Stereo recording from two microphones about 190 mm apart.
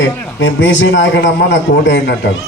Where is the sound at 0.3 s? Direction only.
85° left.